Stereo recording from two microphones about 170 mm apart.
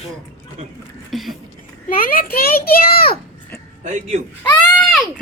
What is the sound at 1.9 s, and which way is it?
A child's voice, 55° left (ahead or behind).